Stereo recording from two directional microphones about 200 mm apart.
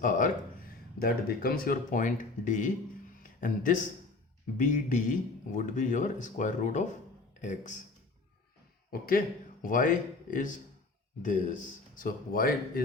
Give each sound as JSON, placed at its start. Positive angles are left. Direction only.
{"t": 0.0, "sound": "speech", "side_deg": 45}
{"t": 8.9, "sound": "speech", "side_deg": 45}